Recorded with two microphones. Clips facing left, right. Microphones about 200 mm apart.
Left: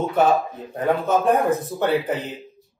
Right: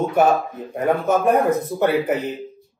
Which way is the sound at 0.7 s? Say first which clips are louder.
Right 1 dB; 10° right (ahead or behind).